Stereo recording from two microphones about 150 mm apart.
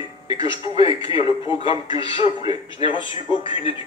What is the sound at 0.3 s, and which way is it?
Speech, 35° left (ahead or behind).